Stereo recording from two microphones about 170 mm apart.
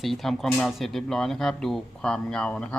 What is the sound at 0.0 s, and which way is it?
Speech, centre (ahead or behind).